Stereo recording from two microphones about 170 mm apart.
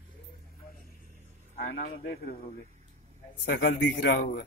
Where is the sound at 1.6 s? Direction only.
70° left (ahead or behind).